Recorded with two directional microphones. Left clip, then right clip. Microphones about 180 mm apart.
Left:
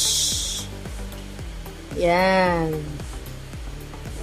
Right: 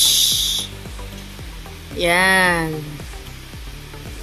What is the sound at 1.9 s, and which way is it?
Speech, 5° left (ahead or behind).